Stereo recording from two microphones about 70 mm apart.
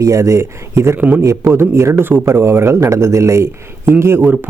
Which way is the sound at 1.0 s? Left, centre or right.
Right.